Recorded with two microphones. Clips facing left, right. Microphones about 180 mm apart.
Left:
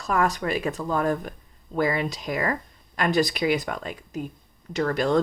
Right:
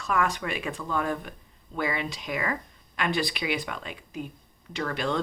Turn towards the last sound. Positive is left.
turn(degrees=40)  # may be behind; listen again after turning